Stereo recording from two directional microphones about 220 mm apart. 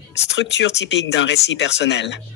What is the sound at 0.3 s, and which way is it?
Speech, 55° left (ahead or behind).